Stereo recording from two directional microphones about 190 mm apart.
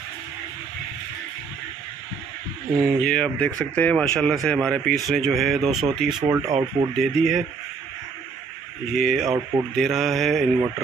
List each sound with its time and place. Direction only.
3.0 s speech: 5° left (ahead or behind)
8.9 s speech: centre (ahead or behind)